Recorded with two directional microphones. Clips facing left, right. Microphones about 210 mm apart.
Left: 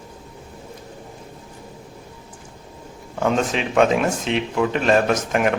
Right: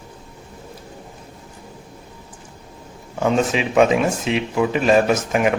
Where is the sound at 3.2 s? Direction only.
5° right (ahead or behind).